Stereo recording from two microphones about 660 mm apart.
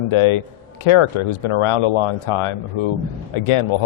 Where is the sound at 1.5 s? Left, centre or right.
Left.